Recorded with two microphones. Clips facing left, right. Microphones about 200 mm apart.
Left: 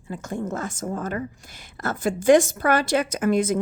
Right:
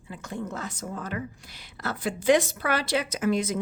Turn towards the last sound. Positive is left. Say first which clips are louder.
# left 5 dB
turn(degrees=50)  # may be behind; listen again after turning